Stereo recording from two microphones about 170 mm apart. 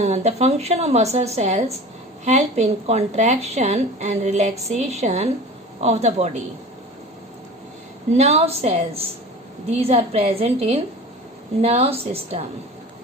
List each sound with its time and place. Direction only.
0.0 s a woman's voice: 40° right (ahead or behind)
8.1 s a woman's voice: 40° right (ahead or behind)